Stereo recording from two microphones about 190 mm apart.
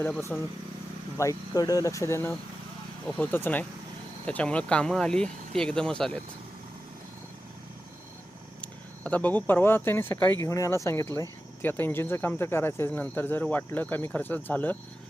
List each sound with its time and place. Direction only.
0.0 s speech: 10° left (ahead or behind)
8.6 s speech: 5° left (ahead or behind)